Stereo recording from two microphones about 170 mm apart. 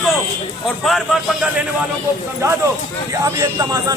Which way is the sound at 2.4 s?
20° right (ahead or behind).